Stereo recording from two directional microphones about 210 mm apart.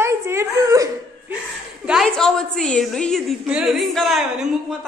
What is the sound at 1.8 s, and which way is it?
A woman's voice, centre (ahead or behind).